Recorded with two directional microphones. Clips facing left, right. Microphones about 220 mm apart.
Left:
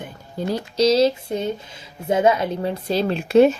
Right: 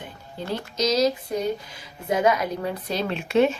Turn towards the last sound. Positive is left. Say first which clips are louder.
# left 6 dB
turn(degrees=35)  # may be behind; listen again after turning